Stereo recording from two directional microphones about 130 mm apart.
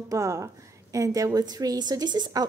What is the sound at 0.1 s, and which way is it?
A woman's voice, 25° right (ahead or behind).